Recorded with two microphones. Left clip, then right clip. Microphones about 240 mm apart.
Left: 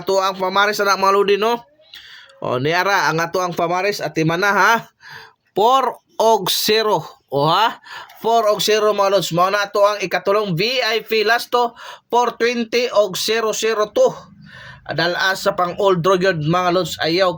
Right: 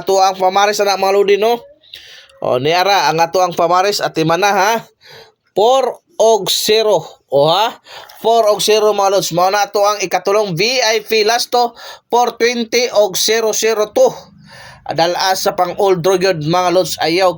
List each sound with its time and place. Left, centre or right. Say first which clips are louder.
0.0 s speech: right 6 dB; centre
2.6 s speech: right 4 dB; centre
3.5 s speech: right 7 dB; left
4.5 s speech: right 1 dB; centre